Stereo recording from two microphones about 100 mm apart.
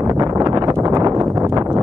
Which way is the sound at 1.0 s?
40° right (ahead or behind).